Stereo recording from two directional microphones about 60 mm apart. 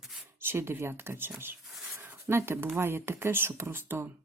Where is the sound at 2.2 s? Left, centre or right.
Right.